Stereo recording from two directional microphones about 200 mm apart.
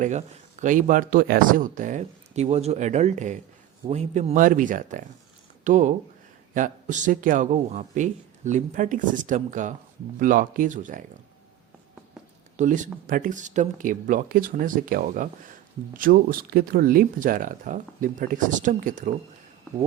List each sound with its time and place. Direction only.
0.0 s speech: 35° right (ahead or behind)
12.5 s speech: 40° right (ahead or behind)